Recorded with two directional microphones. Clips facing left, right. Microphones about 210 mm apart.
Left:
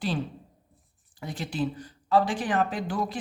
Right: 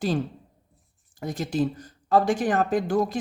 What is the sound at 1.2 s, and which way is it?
Speech, 45° right (ahead or behind).